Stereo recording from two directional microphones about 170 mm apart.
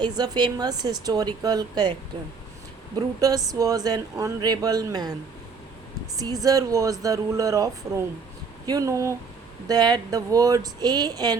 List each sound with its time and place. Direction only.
0.2 s speech: 25° right (ahead or behind)
2.9 s speech: 20° right (ahead or behind)
6.1 s speech: 20° right (ahead or behind)